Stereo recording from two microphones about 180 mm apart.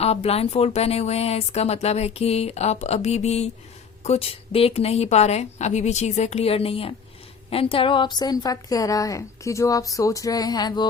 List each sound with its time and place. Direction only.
0.0 s a woman's voice: 35° left (ahead or behind)